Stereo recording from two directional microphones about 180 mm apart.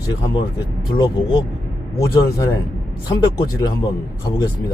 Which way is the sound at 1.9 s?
20° left (ahead or behind).